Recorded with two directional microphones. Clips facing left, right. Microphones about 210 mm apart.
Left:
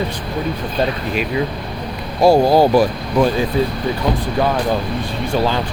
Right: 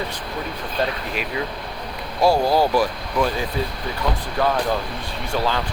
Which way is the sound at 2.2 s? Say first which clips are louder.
Left 6 dB; 20° left (ahead or behind).